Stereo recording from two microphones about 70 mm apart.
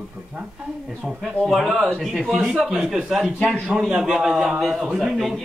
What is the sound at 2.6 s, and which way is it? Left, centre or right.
A man's voice, centre.